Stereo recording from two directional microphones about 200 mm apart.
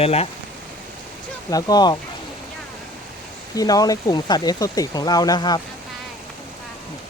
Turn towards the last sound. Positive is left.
turn(degrees=20)  # may be behind; listen again after turning